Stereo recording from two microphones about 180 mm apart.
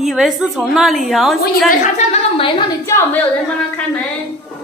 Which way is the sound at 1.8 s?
35° left (ahead or behind).